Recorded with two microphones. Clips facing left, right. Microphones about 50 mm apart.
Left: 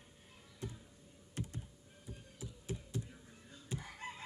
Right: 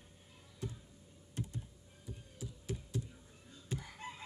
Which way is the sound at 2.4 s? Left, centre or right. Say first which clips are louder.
Right 1 dB; left.